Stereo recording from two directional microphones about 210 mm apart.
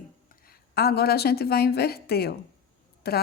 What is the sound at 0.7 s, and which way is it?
A woman's voice, 50° left (ahead or behind).